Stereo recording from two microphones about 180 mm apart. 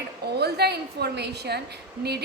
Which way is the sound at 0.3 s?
65° right (ahead or behind).